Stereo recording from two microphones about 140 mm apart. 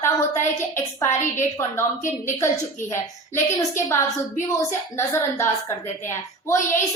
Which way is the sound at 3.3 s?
15° left (ahead or behind).